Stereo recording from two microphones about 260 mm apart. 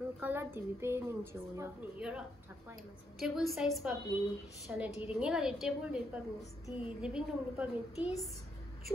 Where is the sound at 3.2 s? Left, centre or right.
Centre.